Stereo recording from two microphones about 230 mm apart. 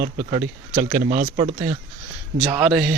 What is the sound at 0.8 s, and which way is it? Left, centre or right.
Speech, centre.